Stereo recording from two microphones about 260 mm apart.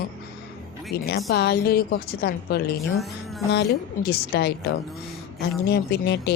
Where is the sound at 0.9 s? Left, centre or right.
Left.